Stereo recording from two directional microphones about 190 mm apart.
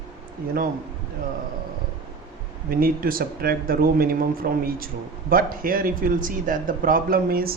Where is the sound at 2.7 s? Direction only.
50° right (ahead or behind).